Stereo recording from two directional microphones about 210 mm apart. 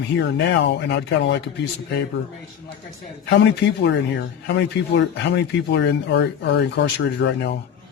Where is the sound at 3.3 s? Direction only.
60° left (ahead or behind).